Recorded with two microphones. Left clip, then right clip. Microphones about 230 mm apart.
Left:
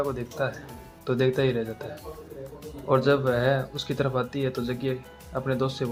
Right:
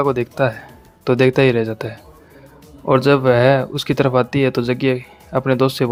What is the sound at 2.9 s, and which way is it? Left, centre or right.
Speech, right.